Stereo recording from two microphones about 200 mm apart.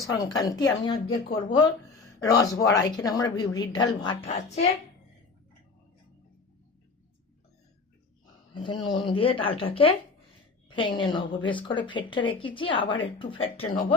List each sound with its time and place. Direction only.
0.0 s a woman's voice: 20° left (ahead or behind)
8.5 s a woman's voice: 20° left (ahead or behind)